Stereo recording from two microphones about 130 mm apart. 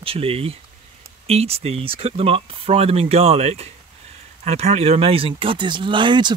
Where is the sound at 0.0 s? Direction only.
45° right (ahead or behind).